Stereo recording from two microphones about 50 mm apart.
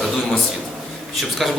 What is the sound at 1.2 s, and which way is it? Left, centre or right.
Speech, centre.